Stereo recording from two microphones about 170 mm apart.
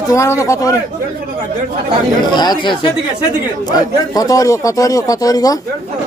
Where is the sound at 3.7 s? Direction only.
20° left (ahead or behind).